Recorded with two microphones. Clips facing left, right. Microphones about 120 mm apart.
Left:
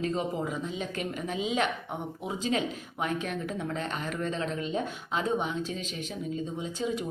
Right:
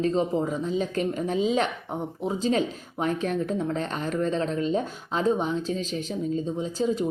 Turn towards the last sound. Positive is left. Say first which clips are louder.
# right 6 dB
turn(degrees=-35)  # may be behind; listen again after turning